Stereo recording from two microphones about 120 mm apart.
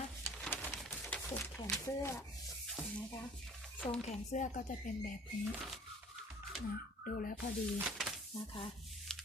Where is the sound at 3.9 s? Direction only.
80° left.